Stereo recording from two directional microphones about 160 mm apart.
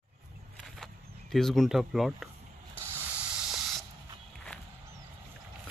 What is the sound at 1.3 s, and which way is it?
Speech, centre (ahead or behind).